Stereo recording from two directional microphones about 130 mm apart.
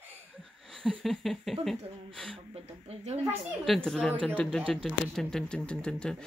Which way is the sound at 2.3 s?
50° right (ahead or behind).